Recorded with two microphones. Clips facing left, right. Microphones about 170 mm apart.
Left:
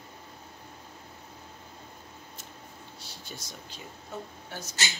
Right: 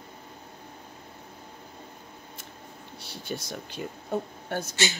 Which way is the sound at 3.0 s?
60° right (ahead or behind).